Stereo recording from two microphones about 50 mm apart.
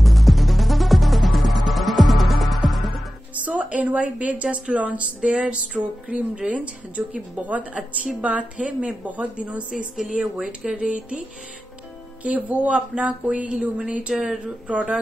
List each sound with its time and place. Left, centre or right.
0.0 s music: centre
3.4 s a woman's voice: right
10.4 s speech: centre
12.2 s a woman's voice: right; by 14.4 s centre
14.7 s a woman's voice: right